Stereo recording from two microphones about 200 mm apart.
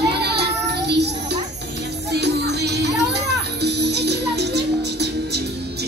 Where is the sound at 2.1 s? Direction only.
55° right (ahead or behind).